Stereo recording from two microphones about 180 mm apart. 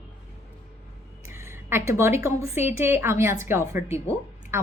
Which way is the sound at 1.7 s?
15° right (ahead or behind).